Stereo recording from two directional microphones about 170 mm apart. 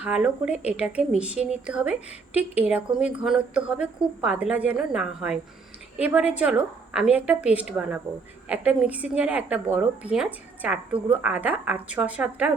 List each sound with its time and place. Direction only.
0.0 s a woman's voice: 5° right (ahead or behind)